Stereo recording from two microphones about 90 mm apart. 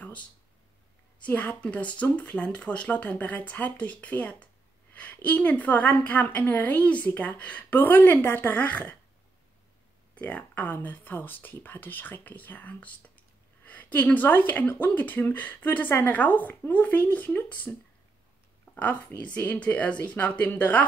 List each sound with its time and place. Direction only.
1.2 s a woman's voice: 20° left (ahead or behind)
10.1 s speech: 15° left (ahead or behind)
18.8 s a woman's voice: 20° left (ahead or behind)